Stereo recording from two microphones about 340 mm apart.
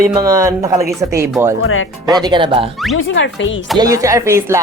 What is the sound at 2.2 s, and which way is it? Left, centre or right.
Speech, centre.